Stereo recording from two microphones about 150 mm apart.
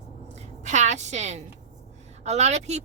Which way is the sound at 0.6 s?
50° right (ahead or behind).